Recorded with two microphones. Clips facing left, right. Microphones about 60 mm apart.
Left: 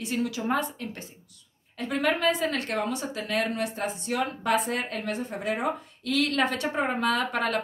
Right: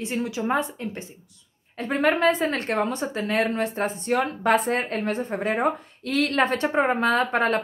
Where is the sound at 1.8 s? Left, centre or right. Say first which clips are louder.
Right 4 dB; right.